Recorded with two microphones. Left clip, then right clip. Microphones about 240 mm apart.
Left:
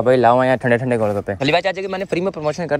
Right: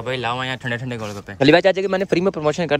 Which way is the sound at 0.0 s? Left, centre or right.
Centre.